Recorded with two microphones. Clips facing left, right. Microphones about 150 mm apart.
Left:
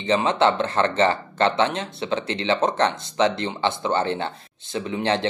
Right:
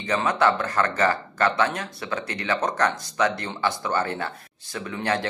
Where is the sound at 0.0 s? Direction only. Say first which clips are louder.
Left 3 dB; 25° left (ahead or behind).